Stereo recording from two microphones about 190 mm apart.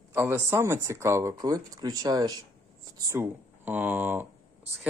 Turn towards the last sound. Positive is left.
turn(degrees=-10)  # may be behind; listen again after turning